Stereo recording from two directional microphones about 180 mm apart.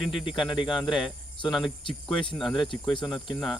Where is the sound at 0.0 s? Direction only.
Centre (ahead or behind).